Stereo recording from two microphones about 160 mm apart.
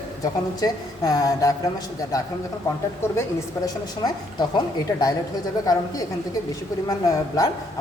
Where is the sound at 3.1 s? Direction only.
20° left (ahead or behind).